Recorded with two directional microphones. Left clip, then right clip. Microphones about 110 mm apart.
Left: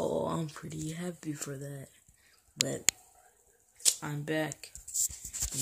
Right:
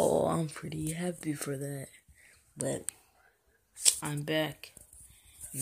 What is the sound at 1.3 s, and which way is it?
Speech, 15° right (ahead or behind).